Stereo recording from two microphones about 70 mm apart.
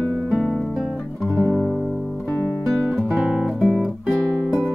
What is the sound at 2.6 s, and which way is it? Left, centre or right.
Guitar, centre.